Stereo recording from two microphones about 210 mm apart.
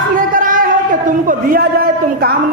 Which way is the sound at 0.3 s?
40° right (ahead or behind).